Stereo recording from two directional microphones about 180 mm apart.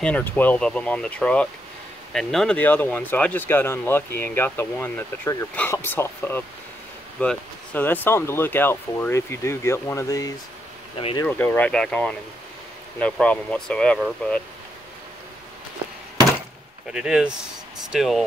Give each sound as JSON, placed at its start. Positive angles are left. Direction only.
{"t": 0.0, "sound": "speech", "side_deg": 10}
{"t": 11.0, "sound": "speech", "side_deg": 30}
{"t": 11.2, "sound": "speech", "side_deg": 10}
{"t": 16.8, "sound": "speech", "side_deg": -5}